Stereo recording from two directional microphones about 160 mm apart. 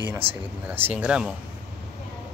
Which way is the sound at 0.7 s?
10° right (ahead or behind).